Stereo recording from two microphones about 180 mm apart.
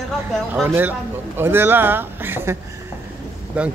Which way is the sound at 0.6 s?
10° right (ahead or behind).